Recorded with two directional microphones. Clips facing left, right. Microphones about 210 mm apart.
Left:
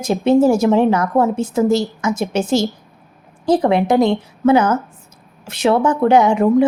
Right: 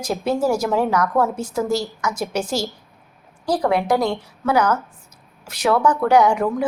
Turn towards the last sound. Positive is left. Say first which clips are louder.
# left 4 dB
turn(degrees=25)  # may be behind; listen again after turning